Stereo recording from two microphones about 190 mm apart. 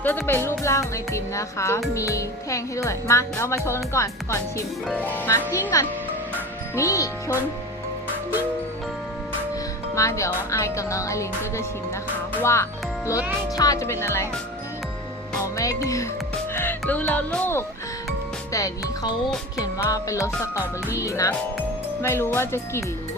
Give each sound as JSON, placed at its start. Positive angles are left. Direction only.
{"t": 0.0, "sound": "speech", "side_deg": 10}
{"t": 9.9, "sound": "speech", "side_deg": 15}
{"t": 15.5, "sound": "speech", "side_deg": 15}